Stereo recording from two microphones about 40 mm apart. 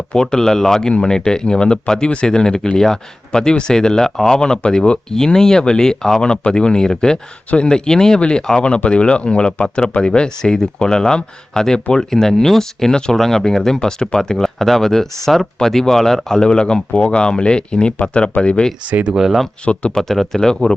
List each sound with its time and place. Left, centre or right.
0.1 s speech: centre
14.3 s speech: centre; by 18.6 s left
19.1 s speech: centre
19.9 s speech: centre